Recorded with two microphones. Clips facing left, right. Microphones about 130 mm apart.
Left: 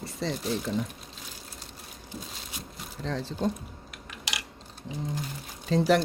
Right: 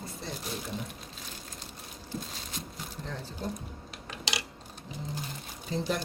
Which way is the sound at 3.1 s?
90° left.